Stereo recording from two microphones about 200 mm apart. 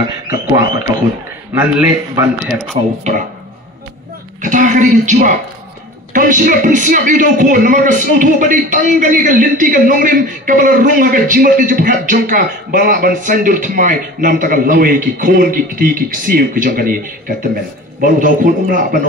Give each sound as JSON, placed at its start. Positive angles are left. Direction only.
{"t": 0.0, "sound": "a sound", "side_deg": -20}
{"t": 1.5, "sound": "a man's voice", "side_deg": -10}
{"t": 3.0, "sound": "speech", "side_deg": -35}
{"t": 4.4, "sound": "a man's voice", "side_deg": -40}